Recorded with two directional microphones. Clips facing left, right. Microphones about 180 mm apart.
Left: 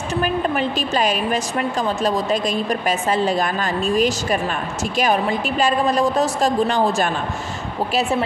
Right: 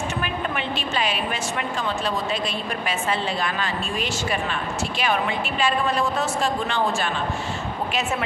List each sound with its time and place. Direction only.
0.2 s a woman's voice: 40° left (ahead or behind)